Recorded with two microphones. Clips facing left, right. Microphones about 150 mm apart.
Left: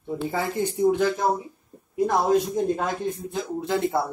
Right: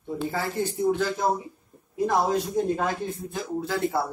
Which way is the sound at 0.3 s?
15° left (ahead or behind).